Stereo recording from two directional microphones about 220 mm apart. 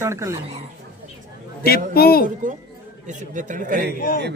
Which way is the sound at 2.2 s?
35° right (ahead or behind).